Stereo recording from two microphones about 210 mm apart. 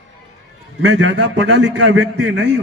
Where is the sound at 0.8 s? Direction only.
60° right (ahead or behind).